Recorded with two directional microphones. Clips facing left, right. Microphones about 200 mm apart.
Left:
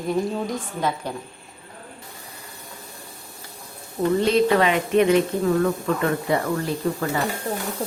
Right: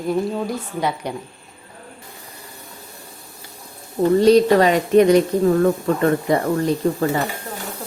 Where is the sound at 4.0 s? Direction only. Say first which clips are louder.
Right 6 dB; 40° right (ahead or behind).